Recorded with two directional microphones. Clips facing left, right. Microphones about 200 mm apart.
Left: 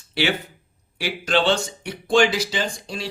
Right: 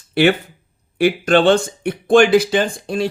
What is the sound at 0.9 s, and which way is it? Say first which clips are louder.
Speech: right 8 dB; 55° right (ahead or behind).